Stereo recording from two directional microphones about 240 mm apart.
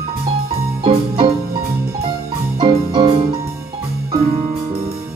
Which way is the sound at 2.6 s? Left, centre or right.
Centre.